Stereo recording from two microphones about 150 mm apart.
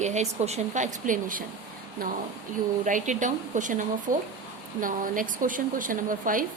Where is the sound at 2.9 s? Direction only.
55° right (ahead or behind).